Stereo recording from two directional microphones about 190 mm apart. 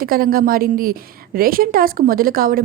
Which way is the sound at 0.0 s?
50° right (ahead or behind).